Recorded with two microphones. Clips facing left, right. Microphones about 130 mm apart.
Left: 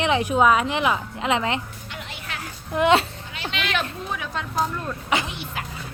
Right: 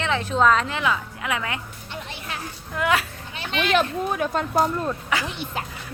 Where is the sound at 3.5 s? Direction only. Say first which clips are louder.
Right 6 dB; 40° right (ahead or behind).